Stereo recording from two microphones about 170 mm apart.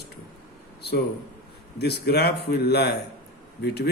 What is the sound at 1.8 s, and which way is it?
A man's voice, 75° left (ahead or behind).